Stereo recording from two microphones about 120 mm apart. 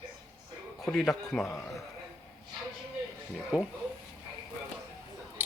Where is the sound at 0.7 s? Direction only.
Centre (ahead or behind).